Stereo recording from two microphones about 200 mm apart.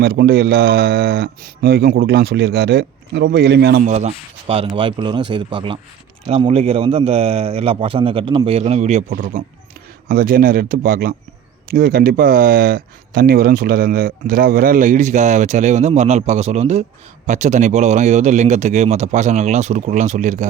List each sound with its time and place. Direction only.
0.0 s speech: 50° right (ahead or behind)
3.8 s speech: 35° right (ahead or behind)